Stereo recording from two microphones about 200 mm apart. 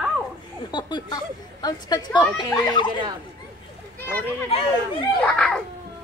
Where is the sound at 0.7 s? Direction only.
20° left (ahead or behind).